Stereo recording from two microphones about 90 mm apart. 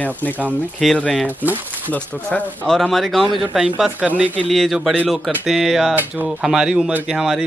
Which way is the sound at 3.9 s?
15° right (ahead or behind).